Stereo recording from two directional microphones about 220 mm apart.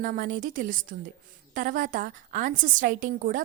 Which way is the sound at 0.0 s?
35° right (ahead or behind).